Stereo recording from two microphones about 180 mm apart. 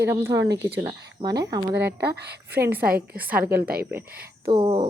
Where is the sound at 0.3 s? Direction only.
80° right.